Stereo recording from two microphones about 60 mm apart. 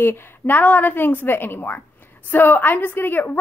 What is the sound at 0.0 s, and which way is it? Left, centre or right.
A woman's voice, left.